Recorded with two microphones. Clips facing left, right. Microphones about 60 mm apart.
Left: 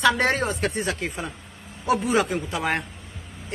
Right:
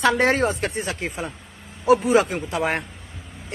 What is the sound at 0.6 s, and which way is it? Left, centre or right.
Speech, right.